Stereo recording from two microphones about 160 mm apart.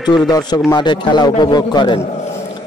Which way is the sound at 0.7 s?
30° left (ahead or behind).